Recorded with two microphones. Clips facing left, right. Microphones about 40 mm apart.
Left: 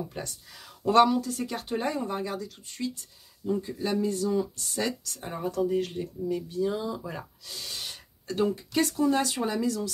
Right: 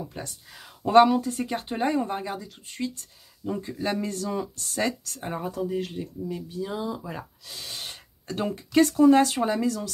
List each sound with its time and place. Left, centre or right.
0.0 s speech: centre
2.6 s speech: right
5.2 s speech: centre
5.6 s speech: centre; by 8.0 s right
8.3 s speech: right